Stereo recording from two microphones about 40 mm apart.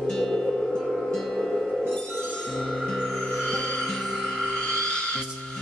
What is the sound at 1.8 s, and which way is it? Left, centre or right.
Music, centre.